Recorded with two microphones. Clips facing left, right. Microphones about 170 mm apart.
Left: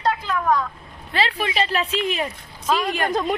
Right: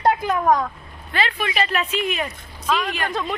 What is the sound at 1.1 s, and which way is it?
Speech, 30° left (ahead or behind).